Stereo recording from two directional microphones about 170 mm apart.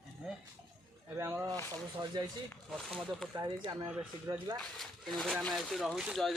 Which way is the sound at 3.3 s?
20° right (ahead or behind).